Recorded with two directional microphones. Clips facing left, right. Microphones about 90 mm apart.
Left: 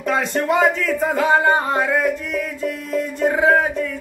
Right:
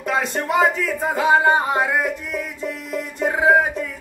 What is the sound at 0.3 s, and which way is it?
Speech, 20° right (ahead or behind).